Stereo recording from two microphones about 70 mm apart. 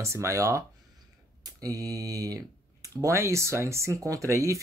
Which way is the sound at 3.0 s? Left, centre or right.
Right.